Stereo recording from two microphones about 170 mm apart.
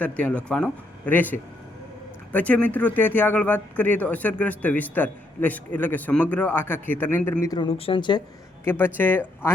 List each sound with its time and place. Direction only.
0.2 s speech: 5° left (ahead or behind)
7.7 s speech: 35° left (ahead or behind)
8.6 s speech: 10° left (ahead or behind)